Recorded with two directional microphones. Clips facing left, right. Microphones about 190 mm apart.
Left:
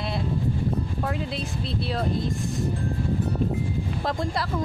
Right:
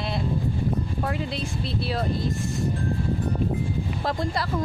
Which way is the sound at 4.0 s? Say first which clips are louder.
Even; centre (ahead or behind).